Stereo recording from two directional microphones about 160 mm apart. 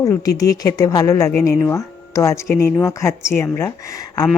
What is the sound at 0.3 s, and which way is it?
A woman's voice, 20° left (ahead or behind).